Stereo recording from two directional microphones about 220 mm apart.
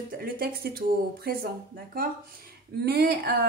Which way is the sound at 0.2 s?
40° right (ahead or behind).